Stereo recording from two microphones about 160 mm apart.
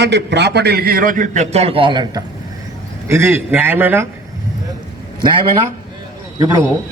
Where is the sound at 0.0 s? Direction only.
90° right; by 2.2 s 30° right (ahead or behind).